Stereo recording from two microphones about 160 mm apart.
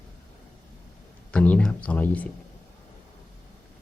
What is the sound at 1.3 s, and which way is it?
Speech, 10° left (ahead or behind).